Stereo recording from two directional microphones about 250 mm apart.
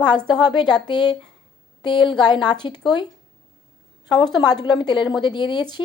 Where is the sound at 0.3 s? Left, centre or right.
Centre.